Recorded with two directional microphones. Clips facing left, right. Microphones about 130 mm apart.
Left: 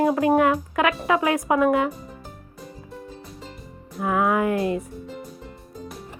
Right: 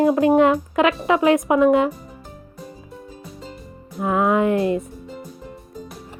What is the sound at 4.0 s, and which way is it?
Speech, 25° right (ahead or behind).